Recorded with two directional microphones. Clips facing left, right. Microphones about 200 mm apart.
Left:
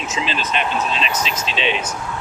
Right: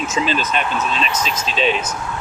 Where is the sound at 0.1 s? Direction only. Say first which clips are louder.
Right 1 dB; 45° right (ahead or behind).